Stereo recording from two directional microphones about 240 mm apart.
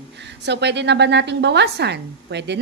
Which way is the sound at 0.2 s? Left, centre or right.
Right.